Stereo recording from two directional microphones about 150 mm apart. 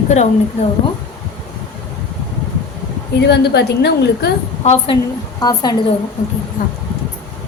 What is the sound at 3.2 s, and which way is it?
A woman's voice, 90° left.